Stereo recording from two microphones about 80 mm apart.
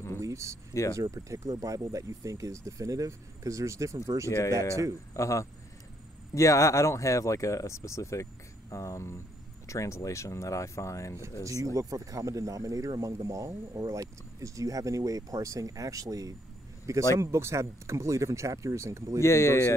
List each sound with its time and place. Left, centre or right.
0.2 s speech: right
5.1 s speech: left
11.4 s speech: right
19.2 s speech: left